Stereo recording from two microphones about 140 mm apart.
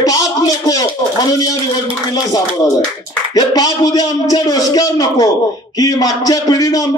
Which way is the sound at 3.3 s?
25° left (ahead or behind).